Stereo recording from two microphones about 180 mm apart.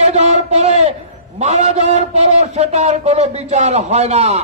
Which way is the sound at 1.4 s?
40° right (ahead or behind).